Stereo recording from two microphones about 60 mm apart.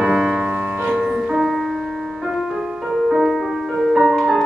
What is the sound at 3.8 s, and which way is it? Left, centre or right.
Music, centre.